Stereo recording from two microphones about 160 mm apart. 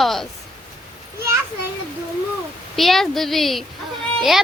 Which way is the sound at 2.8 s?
Centre (ahead or behind).